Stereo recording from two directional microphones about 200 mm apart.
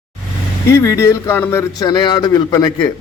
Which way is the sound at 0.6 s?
15° left (ahead or behind).